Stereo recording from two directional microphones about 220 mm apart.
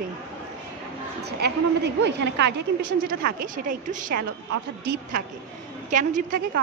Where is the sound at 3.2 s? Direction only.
40° right (ahead or behind).